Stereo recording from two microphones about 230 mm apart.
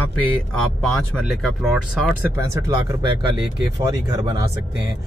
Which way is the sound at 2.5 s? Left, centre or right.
Centre.